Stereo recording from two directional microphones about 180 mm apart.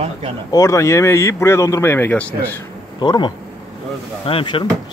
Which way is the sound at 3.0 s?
25° left (ahead or behind).